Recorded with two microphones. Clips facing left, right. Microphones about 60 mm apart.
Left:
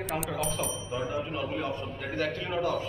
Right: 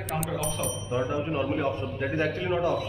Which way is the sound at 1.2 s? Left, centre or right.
Right.